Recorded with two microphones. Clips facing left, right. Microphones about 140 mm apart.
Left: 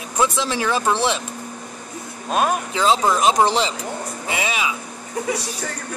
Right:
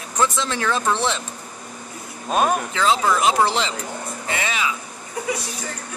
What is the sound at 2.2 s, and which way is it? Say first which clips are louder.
Speech: even; centre (ahead or behind).